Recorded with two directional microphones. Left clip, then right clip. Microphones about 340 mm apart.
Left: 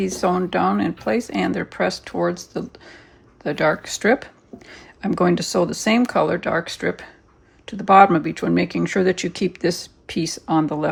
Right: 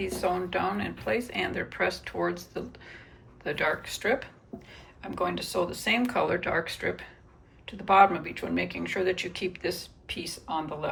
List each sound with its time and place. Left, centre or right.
0.0 s speech: centre